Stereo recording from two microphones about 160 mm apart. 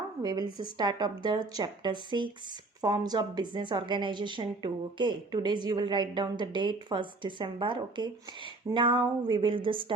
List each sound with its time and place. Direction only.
0.2 s a woman's voice: 25° right (ahead or behind)